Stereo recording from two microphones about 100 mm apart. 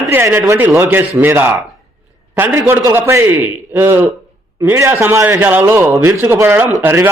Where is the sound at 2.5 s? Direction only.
20° right (ahead or behind).